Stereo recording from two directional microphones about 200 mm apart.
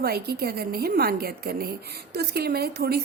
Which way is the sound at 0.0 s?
50° right (ahead or behind).